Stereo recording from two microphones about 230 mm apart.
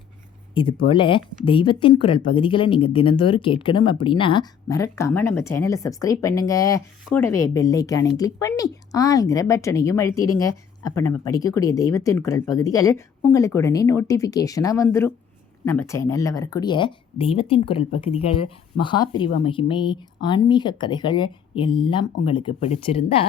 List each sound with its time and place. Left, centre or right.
0.5 s speech: left